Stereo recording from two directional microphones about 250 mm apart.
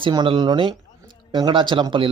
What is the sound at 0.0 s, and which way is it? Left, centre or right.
Speech, centre.